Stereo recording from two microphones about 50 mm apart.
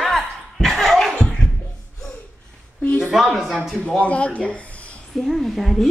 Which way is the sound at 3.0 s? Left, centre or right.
Centre.